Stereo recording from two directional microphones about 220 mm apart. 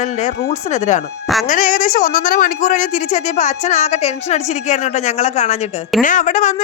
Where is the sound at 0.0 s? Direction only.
30° left (ahead or behind).